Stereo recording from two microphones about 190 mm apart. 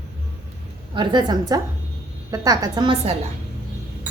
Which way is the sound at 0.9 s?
20° right (ahead or behind).